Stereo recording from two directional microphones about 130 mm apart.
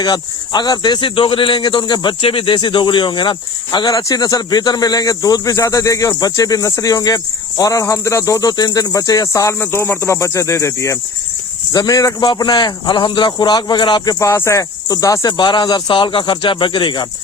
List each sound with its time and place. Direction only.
0.0 s a man's voice: 30° left (ahead or behind)